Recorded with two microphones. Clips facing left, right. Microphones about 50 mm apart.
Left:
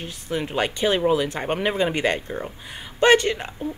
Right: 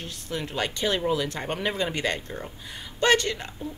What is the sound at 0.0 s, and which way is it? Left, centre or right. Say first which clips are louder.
Speech: left 5 dB; centre.